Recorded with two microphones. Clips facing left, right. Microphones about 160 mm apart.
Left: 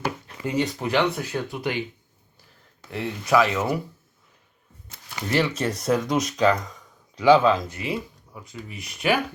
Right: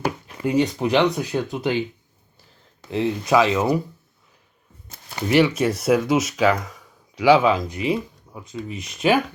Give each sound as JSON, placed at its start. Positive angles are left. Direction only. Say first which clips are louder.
{"t": 0.3, "sound": "speech", "louder": "right 6 dB", "side_deg": -15}
{"t": 2.9, "sound": "speech", "louder": "right 3 dB", "side_deg": -20}
{"t": 4.9, "sound": "a sound", "louder": "right 3 dB", "side_deg": -35}
{"t": 5.3, "sound": "speech", "louder": "right 6 dB", "side_deg": -10}